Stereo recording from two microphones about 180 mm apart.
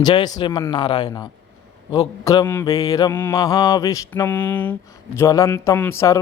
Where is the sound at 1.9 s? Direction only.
20° left (ahead or behind).